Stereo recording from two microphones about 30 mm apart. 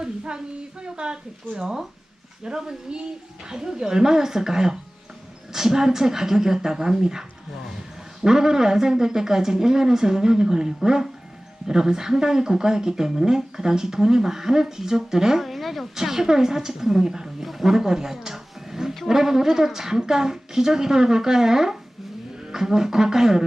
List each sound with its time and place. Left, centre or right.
0.0 s speech: right
11.7 s speech: centre
15.4 s a woman's voice: centre
16.0 s speech: centre
17.0 s speech: right
17.4 s speech: centre